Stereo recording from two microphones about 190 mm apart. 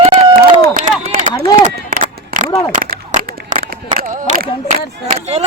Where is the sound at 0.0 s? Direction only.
35° right (ahead or behind).